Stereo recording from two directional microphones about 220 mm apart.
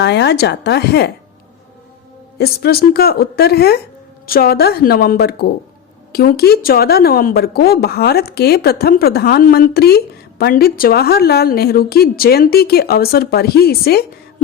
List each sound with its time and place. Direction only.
0.0 s a woman's voice: 50° left (ahead or behind)
2.4 s a woman's voice: 45° left (ahead or behind)